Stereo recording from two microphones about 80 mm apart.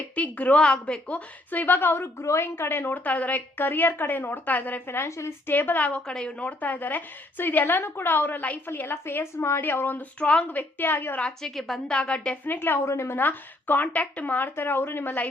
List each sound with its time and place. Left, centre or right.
0.2 s speech: centre; by 5.3 s left
5.5 s speech: left
11.2 s a woman's voice: centre
12.5 s speech: left
13.2 s speech: left